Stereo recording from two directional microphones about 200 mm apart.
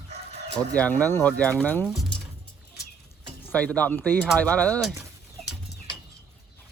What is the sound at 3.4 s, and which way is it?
Speech, 5° left (ahead or behind).